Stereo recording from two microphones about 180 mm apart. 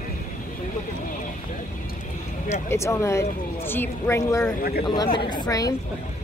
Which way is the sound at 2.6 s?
15° left (ahead or behind).